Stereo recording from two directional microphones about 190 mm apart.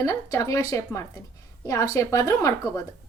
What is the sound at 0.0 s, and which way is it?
A woman's voice, 15° left (ahead or behind).